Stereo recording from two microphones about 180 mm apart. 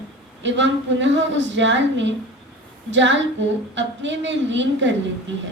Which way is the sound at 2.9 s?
90° right.